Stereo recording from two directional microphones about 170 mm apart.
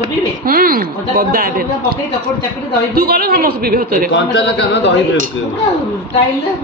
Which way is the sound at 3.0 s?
65° right (ahead or behind).